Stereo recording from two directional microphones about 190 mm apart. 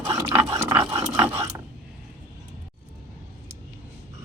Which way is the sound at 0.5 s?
10° right (ahead or behind).